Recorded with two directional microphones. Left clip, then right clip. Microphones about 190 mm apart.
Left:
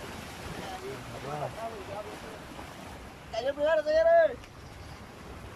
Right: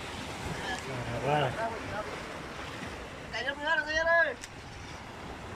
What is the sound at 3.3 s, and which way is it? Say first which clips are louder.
Vehicle: left 3 dB; 50° left (ahead or behind).